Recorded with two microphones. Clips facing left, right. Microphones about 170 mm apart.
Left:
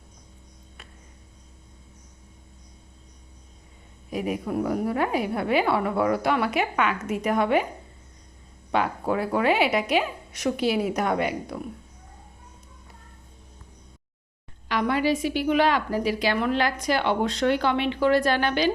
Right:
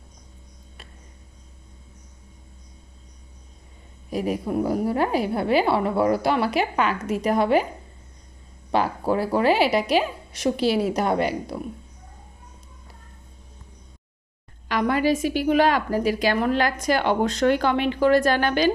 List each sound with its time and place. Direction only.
4.1 s a woman's voice: 35° right (ahead or behind)
8.7 s a woman's voice: 35° right (ahead or behind)
14.7 s a woman's voice: 45° right (ahead or behind)